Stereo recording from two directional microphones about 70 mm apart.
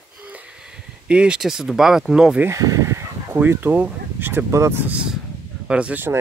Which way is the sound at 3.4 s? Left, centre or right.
Right.